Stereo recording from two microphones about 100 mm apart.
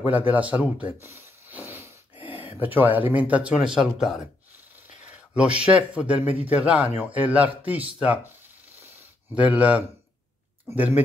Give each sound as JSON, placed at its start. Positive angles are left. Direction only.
{"t": 0.1, "sound": "speech", "side_deg": -15}
{"t": 1.0, "sound": "a sound", "side_deg": -25}
{"t": 5.3, "sound": "speech", "side_deg": -10}
{"t": 9.3, "sound": "speech", "side_deg": -15}